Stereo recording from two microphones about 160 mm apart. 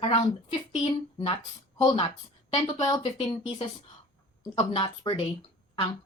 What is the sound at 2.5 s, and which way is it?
Speech, 30° left (ahead or behind).